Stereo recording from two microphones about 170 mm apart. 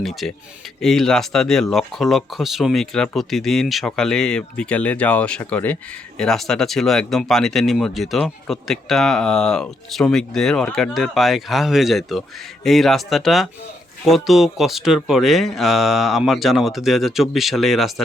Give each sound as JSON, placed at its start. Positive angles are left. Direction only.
{"t": 0.0, "sound": "speech", "side_deg": 0}